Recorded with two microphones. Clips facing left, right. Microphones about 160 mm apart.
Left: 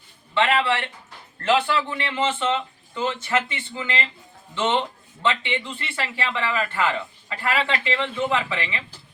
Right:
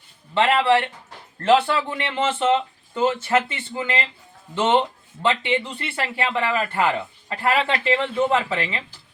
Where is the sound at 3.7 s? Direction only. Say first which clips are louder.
Right 3 dB; 30° right (ahead or behind).